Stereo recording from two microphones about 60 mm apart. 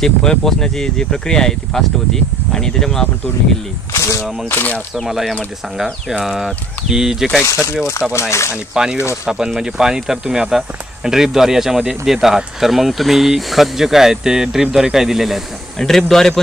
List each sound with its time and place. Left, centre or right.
0.0 s speech: centre
3.9 s speech: left
5.0 s speech: centre
7.4 s speech: left
9.2 s speech: centre
15.8 s speech: centre